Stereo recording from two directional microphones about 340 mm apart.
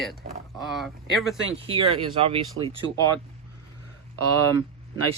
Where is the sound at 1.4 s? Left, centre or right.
Centre.